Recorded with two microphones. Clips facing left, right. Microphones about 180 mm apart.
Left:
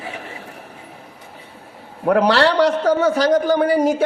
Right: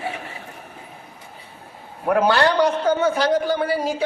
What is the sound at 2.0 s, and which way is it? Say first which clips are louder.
Speech: left 3 dB; 75° left (ahead or behind).